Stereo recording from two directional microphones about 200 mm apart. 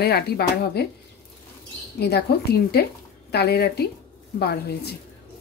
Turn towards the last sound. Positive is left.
turn(degrees=55)  # may be behind; listen again after turning